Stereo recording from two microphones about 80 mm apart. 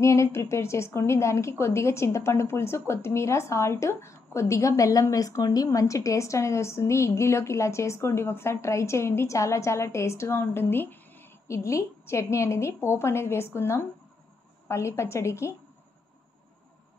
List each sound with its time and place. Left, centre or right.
0.0 s a woman's voice: left
11.4 s a woman's voice: left